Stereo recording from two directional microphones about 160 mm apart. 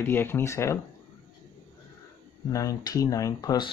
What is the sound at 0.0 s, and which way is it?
Speech, 15° left (ahead or behind).